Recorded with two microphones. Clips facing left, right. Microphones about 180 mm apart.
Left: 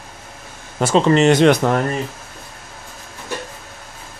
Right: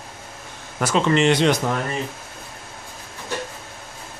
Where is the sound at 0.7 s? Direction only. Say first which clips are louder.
Left 5 dB; 30° left (ahead or behind); by 1.8 s 60° left (ahead or behind).